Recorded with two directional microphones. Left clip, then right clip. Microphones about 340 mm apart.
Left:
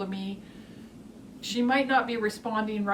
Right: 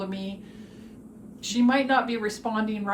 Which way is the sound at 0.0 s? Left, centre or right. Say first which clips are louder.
Right 1 dB; centre.